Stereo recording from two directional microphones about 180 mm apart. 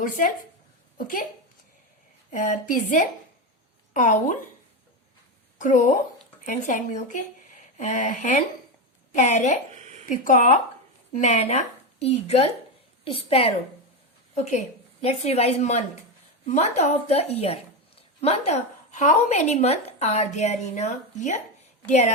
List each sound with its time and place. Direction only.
0.0 s speech: 50° left (ahead or behind)
2.3 s speech: 45° left (ahead or behind)
5.5 s speech: 45° left (ahead or behind)
9.7 s a sound: 40° right (ahead or behind)
10.1 s speech: 45° left (ahead or behind)